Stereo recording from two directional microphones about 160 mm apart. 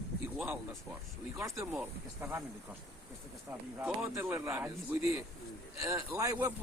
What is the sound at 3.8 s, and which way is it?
Speech, 15° right (ahead or behind).